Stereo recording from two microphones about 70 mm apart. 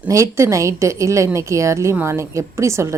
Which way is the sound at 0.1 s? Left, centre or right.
Right.